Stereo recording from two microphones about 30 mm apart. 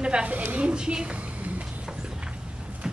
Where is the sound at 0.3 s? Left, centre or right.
Right.